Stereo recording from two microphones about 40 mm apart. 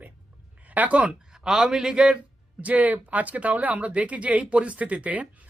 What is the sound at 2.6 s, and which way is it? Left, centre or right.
Speech, right.